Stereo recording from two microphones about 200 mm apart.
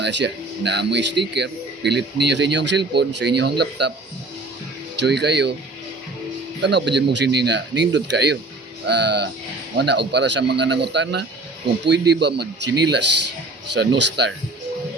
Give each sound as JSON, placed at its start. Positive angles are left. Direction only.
{"t": 0.0, "sound": "a man's voice", "side_deg": -60}
{"t": 4.9, "sound": "a man's voice", "side_deg": -55}
{"t": 6.6, "sound": "a man's voice", "side_deg": -60}